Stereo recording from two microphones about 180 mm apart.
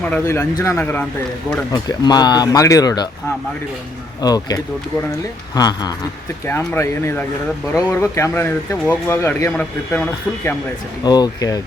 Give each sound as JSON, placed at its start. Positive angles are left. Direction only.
{"t": 0.0, "sound": "speech", "side_deg": 10}
{"t": 0.3, "sound": "speech", "side_deg": 20}
{"t": 1.7, "sound": "speech", "side_deg": 25}
{"t": 4.2, "sound": "speech", "side_deg": 20}
{"t": 11.0, "sound": "speech", "side_deg": 20}